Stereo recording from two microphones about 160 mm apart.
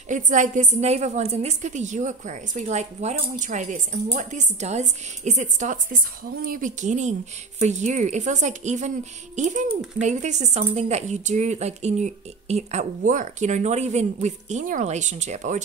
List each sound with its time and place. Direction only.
0.1 s a woman's voice: 50° right (ahead or behind)